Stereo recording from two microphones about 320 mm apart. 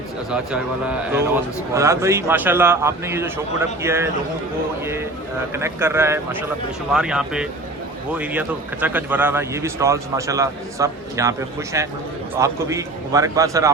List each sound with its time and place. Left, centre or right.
1.7 s a man's voice: centre
5.5 s a man's voice: centre